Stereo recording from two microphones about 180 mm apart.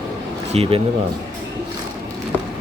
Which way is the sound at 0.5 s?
35° right (ahead or behind).